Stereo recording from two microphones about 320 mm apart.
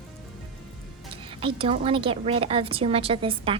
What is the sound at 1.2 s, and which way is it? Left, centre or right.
A woman's voice, centre.